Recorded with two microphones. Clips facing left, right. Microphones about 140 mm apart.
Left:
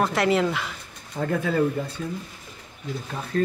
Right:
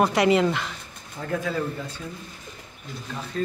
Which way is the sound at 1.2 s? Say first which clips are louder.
Left 7 dB; 65° left (ahead or behind).